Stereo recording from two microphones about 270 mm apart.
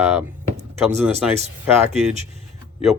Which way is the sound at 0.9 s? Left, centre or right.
Right.